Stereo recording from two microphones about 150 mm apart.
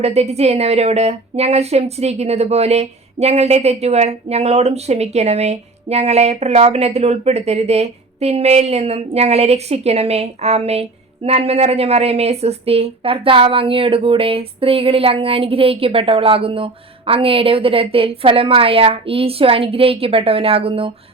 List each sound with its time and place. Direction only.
0.0 s a woman's voice: 45° right (ahead or behind)